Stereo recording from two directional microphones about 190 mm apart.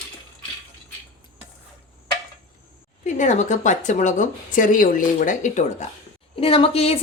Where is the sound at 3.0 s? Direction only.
40° left (ahead or behind).